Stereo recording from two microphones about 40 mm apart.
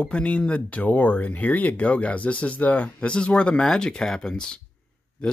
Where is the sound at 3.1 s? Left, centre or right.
Left.